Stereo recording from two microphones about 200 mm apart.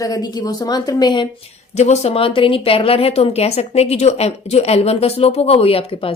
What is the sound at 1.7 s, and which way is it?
A woman's voice, 35° left (ahead or behind).